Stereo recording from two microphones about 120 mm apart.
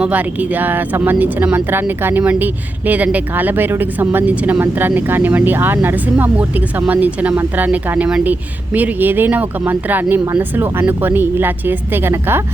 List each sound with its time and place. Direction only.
0.0 s speech: 10° right (ahead or behind)